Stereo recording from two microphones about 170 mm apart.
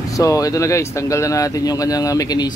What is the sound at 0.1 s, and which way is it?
Speech, 20° left (ahead or behind).